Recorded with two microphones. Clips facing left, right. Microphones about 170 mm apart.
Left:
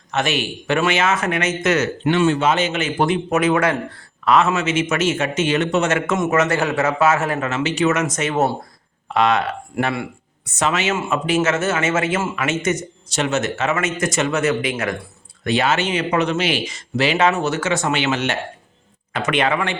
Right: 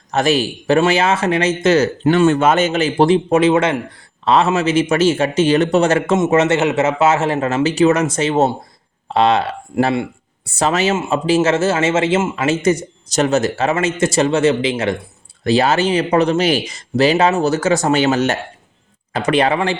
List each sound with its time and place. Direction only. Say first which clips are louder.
0.1 s speech: right 6 dB; 35° right (ahead or behind)
2.0 s speech: right 3 dB; 45° right (ahead or behind)